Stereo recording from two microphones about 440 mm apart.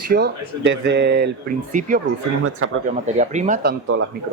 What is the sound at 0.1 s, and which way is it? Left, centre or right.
Speech, right.